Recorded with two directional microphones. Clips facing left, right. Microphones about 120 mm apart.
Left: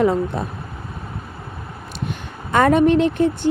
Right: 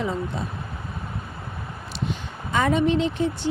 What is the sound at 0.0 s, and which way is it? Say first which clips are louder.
Speech: left 9 dB; 60° left (ahead or behind).